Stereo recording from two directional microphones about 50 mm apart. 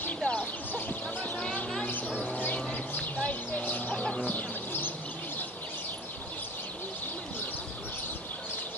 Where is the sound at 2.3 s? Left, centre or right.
Left.